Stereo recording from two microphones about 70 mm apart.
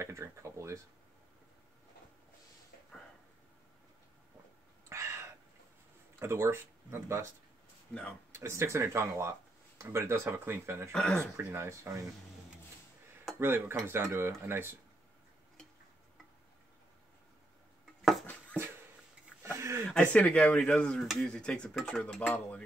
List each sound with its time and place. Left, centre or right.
0.0 s speech: right
4.8 s a sound: right
6.1 s speech: right
8.4 s speech: right
10.9 s speech: centre
11.3 s speech: right
13.4 s speech: right
18.2 s a sound: left
19.4 s a sound: right
20.1 s speech: centre
21.0 s speech: centre
21.3 s speech: centre